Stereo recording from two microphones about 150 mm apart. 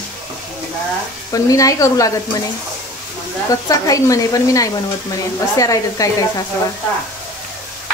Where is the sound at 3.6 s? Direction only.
25° left (ahead or behind).